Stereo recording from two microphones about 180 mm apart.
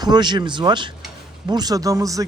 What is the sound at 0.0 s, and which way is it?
A man's voice, 25° right (ahead or behind).